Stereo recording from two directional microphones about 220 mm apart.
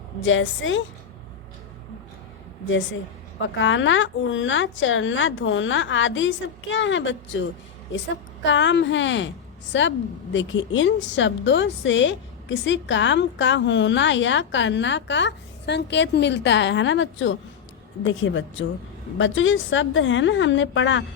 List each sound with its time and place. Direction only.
0.2 s a woman's voice: 60° left (ahead or behind)
3.6 s a woman's voice: 60° left (ahead or behind)